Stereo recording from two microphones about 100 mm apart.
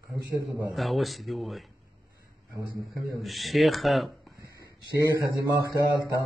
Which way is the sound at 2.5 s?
35° right (ahead or behind).